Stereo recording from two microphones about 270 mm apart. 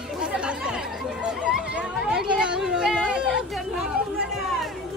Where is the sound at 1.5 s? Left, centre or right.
Centre.